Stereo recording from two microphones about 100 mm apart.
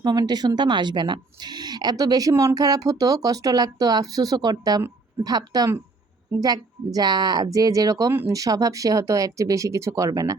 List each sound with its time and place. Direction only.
0.0 s speech: 45° right (ahead or behind)